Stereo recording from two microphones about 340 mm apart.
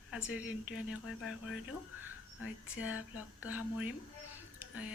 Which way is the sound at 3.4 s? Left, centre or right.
Centre.